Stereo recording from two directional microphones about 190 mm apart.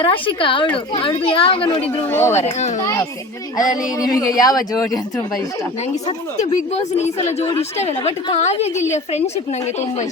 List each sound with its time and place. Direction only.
0.0 s speech: 25° left (ahead or behind)
2.0 s speech: 10° left (ahead or behind)
2.4 s a woman's voice: 35° left (ahead or behind)
2.8 s speech: 15° left (ahead or behind)
5.9 s a woman's voice: 35° left (ahead or behind)